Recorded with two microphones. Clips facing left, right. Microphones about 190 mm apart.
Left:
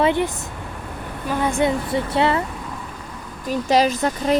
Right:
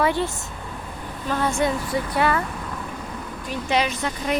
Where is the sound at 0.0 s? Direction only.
20° left (ahead or behind).